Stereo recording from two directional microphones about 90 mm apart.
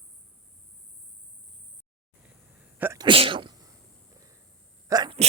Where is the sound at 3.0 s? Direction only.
80° right.